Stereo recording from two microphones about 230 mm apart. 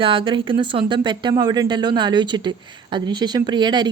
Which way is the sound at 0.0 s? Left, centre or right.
Right.